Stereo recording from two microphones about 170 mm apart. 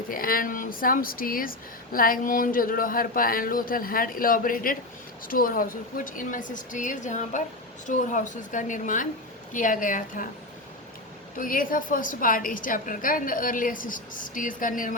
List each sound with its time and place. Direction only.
0.1 s a woman's voice: 55° left (ahead or behind)
11.3 s a woman's voice: 55° left (ahead or behind)